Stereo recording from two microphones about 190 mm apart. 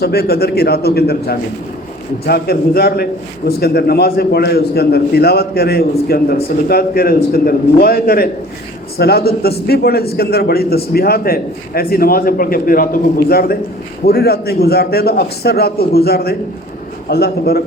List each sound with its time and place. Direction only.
0.0 s a man's voice: 55° left (ahead or behind)